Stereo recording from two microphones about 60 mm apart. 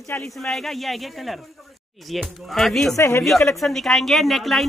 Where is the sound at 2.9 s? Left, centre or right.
Left.